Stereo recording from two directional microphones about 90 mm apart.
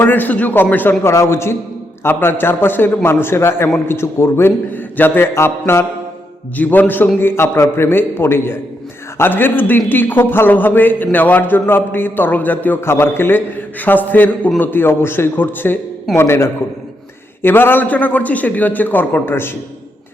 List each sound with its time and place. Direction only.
0.0 s a man's voice: 20° left (ahead or behind)